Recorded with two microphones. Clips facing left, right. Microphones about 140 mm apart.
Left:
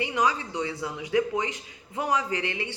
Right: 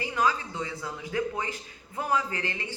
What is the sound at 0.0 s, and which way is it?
Speech, 15° left (ahead or behind).